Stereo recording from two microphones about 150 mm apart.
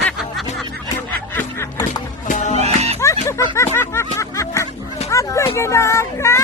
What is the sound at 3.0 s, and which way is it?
Music, 20° left (ahead or behind).